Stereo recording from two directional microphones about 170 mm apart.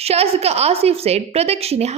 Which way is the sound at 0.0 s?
35° right (ahead or behind).